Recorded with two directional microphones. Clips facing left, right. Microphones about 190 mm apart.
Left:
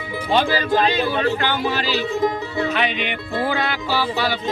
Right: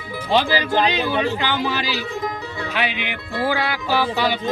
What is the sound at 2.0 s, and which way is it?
Speech, 25° left (ahead or behind).